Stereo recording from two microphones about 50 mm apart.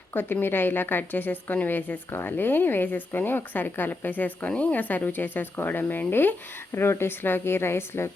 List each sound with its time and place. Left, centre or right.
0.1 s a woman's voice: left
2.0 s speech: left
2.3 s a woman's voice: left
4.4 s a woman's voice: left
6.7 s a woman's voice: left
7.2 s a woman's voice: left